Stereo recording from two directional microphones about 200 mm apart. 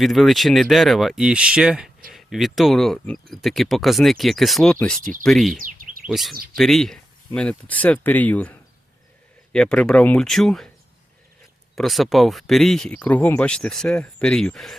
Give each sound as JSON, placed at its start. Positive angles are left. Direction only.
{"t": 0.0, "sound": "speech", "side_deg": 0}
{"t": 5.5, "sound": "bird", "side_deg": -40}
{"t": 6.1, "sound": "speech", "side_deg": 0}
{"t": 11.7, "sound": "speech", "side_deg": 0}